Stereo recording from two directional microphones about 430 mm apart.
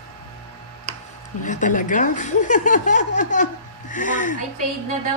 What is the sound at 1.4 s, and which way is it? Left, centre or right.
Speech, centre.